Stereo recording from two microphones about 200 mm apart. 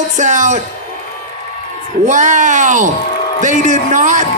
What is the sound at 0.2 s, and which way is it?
Speech, 35° right (ahead or behind).